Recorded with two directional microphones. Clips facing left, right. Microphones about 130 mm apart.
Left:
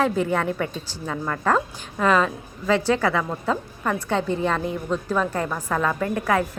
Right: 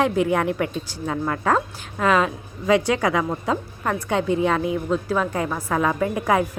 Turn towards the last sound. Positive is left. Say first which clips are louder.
# right 2 dB
turn(degrees=-10)  # may be behind; listen again after turning